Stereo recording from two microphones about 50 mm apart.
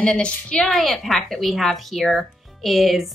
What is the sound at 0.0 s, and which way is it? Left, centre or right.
Speech, left.